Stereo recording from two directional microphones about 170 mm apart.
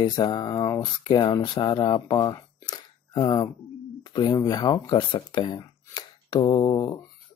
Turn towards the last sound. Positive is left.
turn(degrees=25)  # may be behind; listen again after turning